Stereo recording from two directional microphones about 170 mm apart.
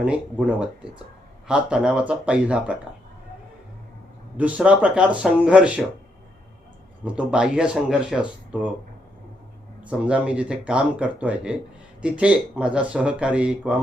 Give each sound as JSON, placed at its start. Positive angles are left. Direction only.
{"t": 0.0, "sound": "speech", "side_deg": -5}
{"t": 4.4, "sound": "speech", "side_deg": -10}
{"t": 7.0, "sound": "speech", "side_deg": -5}
{"t": 9.8, "sound": "speech", "side_deg": -5}